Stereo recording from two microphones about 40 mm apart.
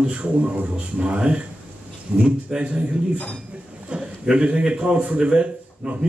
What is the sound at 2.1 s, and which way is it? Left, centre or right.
Speech, centre.